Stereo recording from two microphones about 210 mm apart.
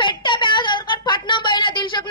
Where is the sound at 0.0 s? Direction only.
25° left (ahead or behind).